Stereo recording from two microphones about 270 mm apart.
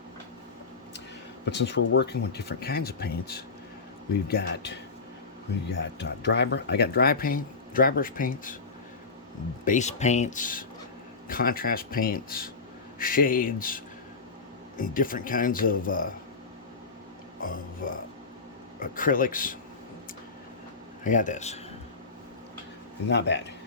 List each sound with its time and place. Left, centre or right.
1.5 s speech: left
5.7 s speech: left
9.6 s speech: left
17.4 s speech: left
21.0 s speech: left
23.0 s speech: left